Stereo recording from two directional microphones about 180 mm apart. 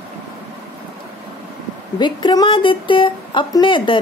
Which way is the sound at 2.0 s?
25° left (ahead or behind).